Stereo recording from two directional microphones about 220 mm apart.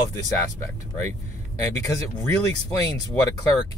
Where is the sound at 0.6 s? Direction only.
10° left (ahead or behind).